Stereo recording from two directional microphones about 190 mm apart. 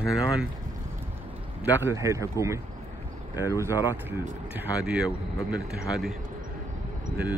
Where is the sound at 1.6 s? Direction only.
10° right (ahead or behind).